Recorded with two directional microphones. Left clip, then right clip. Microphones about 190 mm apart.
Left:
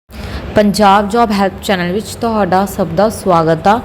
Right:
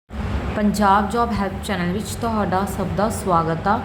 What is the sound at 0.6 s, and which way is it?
A woman's voice, 30° left (ahead or behind).